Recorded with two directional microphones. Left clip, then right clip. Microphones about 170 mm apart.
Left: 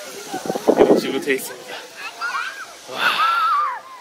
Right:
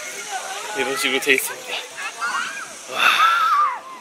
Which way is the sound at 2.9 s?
30° left (ahead or behind).